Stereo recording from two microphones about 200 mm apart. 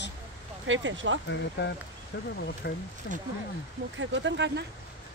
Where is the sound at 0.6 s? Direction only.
70° right (ahead or behind).